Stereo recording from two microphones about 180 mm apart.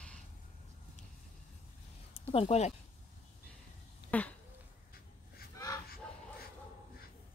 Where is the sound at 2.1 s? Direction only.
35° left (ahead or behind).